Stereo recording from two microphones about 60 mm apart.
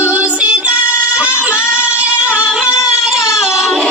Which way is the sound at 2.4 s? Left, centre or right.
Centre.